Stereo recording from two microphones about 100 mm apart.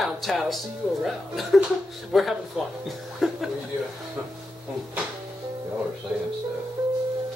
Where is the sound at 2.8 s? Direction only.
Centre (ahead or behind).